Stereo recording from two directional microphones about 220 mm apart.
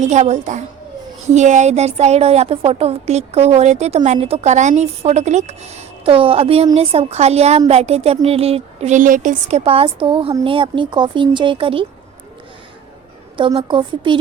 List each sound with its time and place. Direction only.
0.0 s a woman's voice: 30° right (ahead or behind)
13.3 s speech: 25° right (ahead or behind)